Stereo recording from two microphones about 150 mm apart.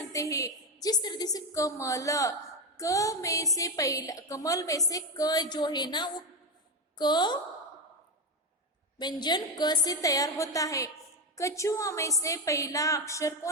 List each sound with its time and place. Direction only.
0.1 s a woman's voice: 20° left (ahead or behind)
9.0 s a woman's voice: 30° left (ahead or behind)